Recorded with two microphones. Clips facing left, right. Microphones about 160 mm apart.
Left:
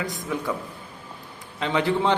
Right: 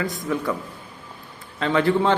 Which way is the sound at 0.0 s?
15° left (ahead or behind).